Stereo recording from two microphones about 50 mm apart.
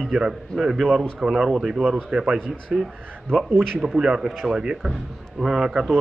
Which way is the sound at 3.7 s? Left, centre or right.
Centre.